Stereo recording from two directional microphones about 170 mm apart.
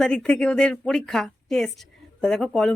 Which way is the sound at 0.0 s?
5° left (ahead or behind).